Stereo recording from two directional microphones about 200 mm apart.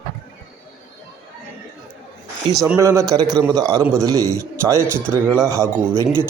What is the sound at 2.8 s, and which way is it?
A man's voice, 15° right (ahead or behind).